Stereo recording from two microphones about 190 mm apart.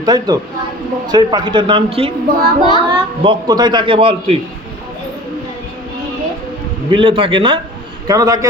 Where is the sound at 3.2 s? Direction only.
25° right (ahead or behind).